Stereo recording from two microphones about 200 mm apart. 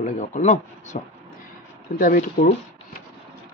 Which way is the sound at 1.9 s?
45° left (ahead or behind).